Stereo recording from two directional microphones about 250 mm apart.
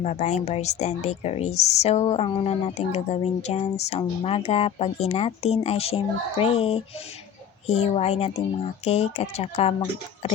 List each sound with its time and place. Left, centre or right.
0.0 s a woman's voice: left